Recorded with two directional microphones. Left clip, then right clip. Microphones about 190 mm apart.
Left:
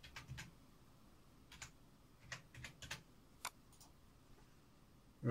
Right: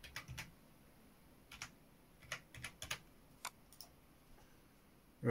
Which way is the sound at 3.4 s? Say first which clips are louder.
Even; centre (ahead or behind).